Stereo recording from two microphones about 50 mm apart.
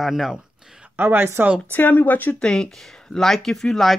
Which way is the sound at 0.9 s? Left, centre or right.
Right.